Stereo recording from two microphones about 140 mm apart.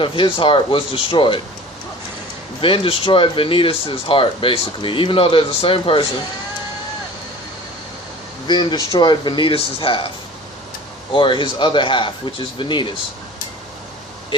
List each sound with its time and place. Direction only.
0.0 s speech: 35° left (ahead or behind)
2.6 s speech: 40° left (ahead or behind)
8.4 s speech: 35° left (ahead or behind)
11.1 s speech: 35° left (ahead or behind)